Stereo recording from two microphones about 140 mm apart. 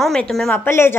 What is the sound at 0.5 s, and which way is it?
Speech, 15° left (ahead or behind).